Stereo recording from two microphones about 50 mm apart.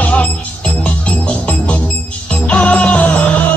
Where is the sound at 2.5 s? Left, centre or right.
Left.